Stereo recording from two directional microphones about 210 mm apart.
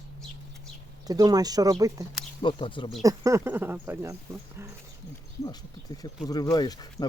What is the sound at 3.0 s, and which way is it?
Speech, 15° right (ahead or behind).